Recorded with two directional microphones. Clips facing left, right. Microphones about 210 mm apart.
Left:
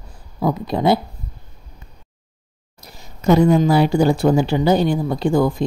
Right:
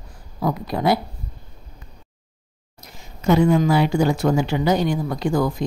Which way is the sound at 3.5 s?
35° left (ahead or behind).